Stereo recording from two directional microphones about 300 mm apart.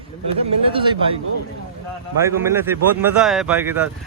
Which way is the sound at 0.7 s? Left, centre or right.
Centre.